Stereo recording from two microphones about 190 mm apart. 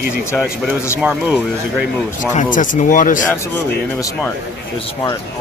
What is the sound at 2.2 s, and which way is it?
Speech, 40° left (ahead or behind).